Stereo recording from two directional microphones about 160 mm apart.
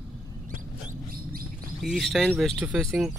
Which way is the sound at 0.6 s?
55° right (ahead or behind).